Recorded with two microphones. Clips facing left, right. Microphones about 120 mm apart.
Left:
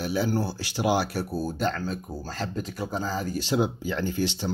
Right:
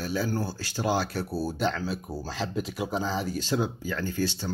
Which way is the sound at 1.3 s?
Centre (ahead or behind).